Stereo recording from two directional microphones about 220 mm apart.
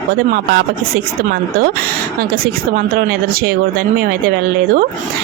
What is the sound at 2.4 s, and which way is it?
Speech, 40° right (ahead or behind).